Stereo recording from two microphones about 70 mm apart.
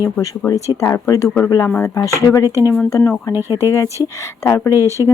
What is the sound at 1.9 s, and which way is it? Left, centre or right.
Speech, left.